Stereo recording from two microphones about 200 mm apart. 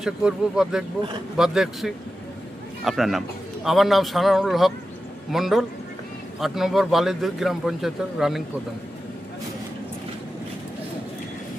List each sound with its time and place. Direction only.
0.0 s a man's voice: 5° right (ahead or behind)